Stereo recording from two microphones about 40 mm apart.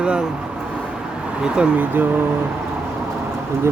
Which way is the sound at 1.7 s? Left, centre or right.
Right.